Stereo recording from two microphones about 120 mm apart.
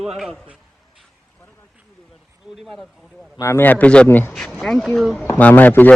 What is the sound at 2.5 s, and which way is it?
Speech, centre (ahead or behind).